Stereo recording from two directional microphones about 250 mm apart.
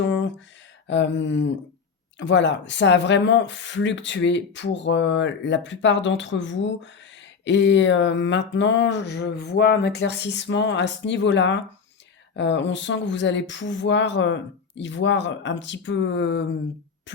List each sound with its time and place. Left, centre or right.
0.1 s a sound: left
0.9 s speech: left
17.1 s beatboxing: left